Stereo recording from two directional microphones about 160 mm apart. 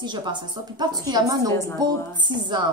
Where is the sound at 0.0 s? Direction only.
30° right (ahead or behind).